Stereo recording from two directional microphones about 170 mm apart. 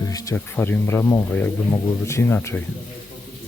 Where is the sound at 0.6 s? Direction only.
10° left (ahead or behind).